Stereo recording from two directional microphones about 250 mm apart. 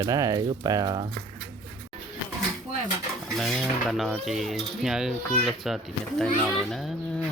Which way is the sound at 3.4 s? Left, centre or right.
Centre.